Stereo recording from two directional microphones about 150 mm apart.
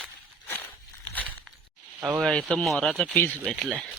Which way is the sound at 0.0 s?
15° left (ahead or behind).